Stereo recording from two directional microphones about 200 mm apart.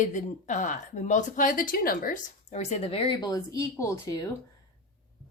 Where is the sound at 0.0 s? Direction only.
40° left (ahead or behind); by 4.3 s 15° left (ahead or behind).